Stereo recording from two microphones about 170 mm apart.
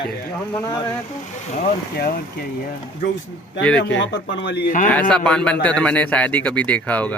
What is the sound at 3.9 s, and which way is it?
Speech, 90° left.